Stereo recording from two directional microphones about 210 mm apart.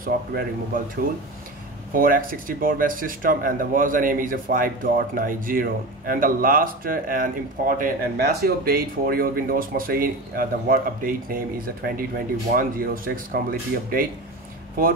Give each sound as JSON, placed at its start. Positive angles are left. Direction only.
{"t": 0.0, "sound": "speech", "side_deg": -45}
{"t": 2.0, "sound": "speech", "side_deg": -40}